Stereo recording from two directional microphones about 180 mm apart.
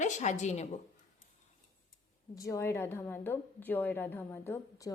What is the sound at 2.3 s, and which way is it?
A woman's voice, 20° left (ahead or behind).